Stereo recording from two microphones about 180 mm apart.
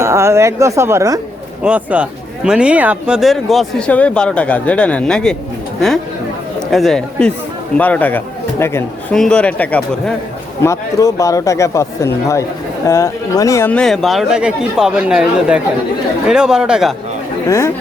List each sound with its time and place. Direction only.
0.0 s a woman's voice: 15° right (ahead or behind); by 5.4 s 5° left (ahead or behind)
6.6 s a man's voice: centre (ahead or behind)
9.1 s speech: 5° left (ahead or behind)
10.6 s speech: 15° left (ahead or behind); by 16.9 s 5° right (ahead or behind)